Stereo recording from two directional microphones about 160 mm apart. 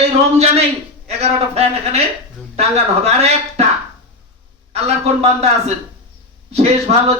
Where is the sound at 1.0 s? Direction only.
40° right (ahead or behind).